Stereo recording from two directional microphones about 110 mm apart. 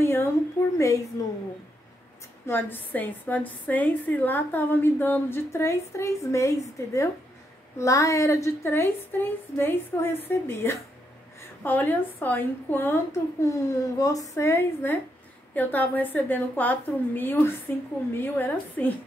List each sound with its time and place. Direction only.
0.0 s a sound: 20° left (ahead or behind)
0.7 s a woman's voice: 30° left (ahead or behind)
2.4 s a woman's voice: 20° left (ahead or behind)
13.5 s a woman's voice: 30° left (ahead or behind); by 18.9 s 15° left (ahead or behind)